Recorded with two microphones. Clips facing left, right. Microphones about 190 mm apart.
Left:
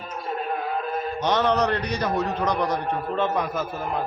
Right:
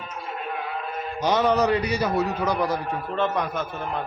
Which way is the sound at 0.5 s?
40° left (ahead or behind).